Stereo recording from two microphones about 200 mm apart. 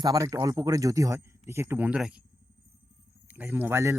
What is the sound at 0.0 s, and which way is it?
Speech, 20° right (ahead or behind).